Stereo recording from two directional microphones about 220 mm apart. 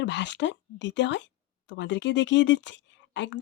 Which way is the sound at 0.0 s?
55° left (ahead or behind).